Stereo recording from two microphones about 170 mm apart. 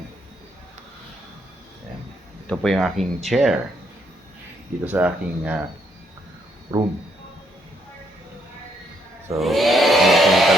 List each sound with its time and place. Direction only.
2.5 s speech: centre (ahead or behind)
4.9 s speech: 10° right (ahead or behind)
6.7 s speech: 20° right (ahead or behind)
9.4 s hair dryer: centre (ahead or behind)